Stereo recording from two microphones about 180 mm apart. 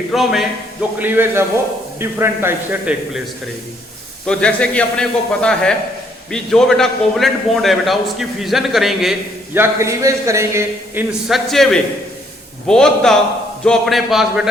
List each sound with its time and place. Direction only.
0.1 s a man's voice: centre (ahead or behind)
4.3 s a man's voice: 5° left (ahead or behind)
9.6 s a man's voice: 15° right (ahead or behind)
11.3 s a man's voice: centre (ahead or behind)